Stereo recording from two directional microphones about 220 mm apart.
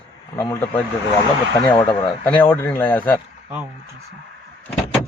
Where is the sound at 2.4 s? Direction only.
10° left (ahead or behind).